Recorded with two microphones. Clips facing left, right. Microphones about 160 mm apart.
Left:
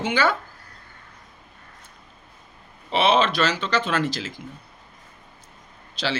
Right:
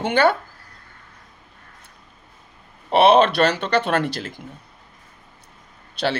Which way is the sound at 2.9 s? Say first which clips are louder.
Right 6 dB; 60° right (ahead or behind).